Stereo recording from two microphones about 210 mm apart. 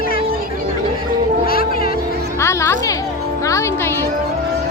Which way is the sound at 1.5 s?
45° left (ahead or behind).